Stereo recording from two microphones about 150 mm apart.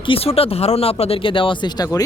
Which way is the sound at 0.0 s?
40° left (ahead or behind).